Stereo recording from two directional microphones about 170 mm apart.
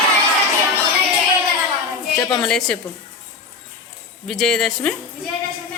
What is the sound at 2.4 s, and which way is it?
Speech, 5° left (ahead or behind).